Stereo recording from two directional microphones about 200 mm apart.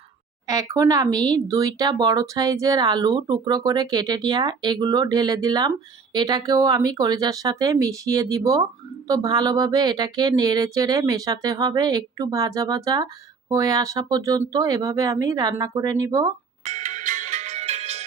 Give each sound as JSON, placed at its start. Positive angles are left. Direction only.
{"t": 0.4, "sound": "speech", "side_deg": -15}
{"t": 16.6, "sound": "ringtone", "side_deg": -35}